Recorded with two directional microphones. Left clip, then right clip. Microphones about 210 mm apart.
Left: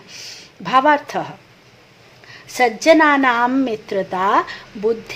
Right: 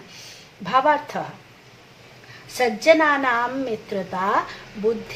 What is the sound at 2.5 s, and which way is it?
A woman's voice, 50° left (ahead or behind).